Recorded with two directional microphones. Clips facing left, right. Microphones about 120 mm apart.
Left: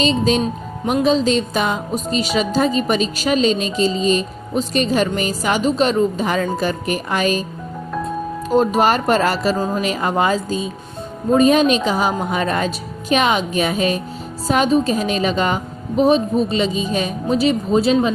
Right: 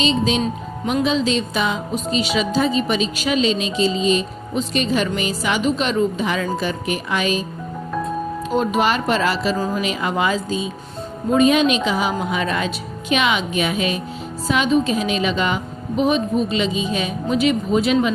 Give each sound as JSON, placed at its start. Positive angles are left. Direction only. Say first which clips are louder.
{"t": 0.0, "sound": "a woman's voice", "louder": "left 2 dB", "side_deg": 40}
{"t": 8.4, "sound": "a woman's voice", "louder": "left 4 dB", "side_deg": 40}